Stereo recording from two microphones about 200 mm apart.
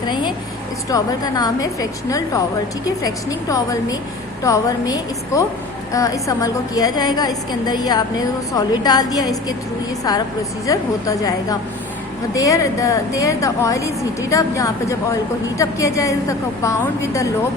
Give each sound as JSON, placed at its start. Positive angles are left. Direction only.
{"t": 0.1, "sound": "a woman's voice", "side_deg": 20}